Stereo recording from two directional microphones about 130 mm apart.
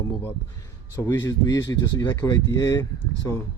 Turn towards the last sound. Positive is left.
turn(degrees=25)  # may be behind; listen again after turning